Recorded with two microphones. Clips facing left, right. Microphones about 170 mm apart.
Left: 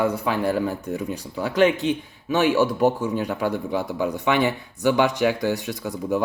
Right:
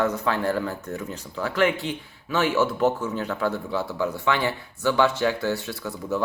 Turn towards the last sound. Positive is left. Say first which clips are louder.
# left 3 dB
turn(degrees=15)  # may be behind; listen again after turning